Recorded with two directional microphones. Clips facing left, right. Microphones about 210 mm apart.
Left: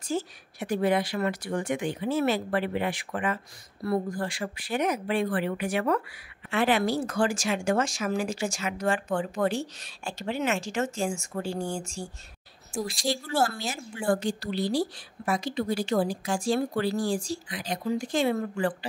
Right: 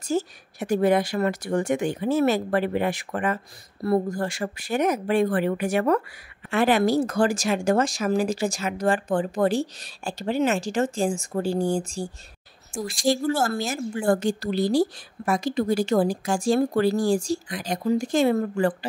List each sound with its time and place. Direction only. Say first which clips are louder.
0.0 s a woman's voice: right 5 dB; 45° right (ahead or behind)
12.8 s a woman's voice: right 9 dB; 50° right (ahead or behind)